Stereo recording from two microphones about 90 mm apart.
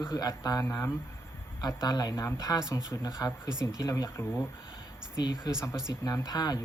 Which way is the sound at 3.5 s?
50° right (ahead or behind).